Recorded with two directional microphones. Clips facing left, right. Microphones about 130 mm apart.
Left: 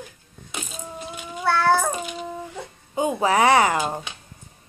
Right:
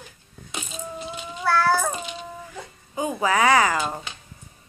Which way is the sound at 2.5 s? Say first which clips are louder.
Left 4 dB; 25° left (ahead or behind).